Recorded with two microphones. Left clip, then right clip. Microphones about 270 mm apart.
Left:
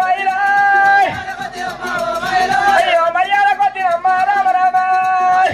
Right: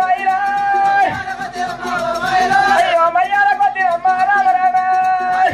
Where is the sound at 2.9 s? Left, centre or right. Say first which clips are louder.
Even; left.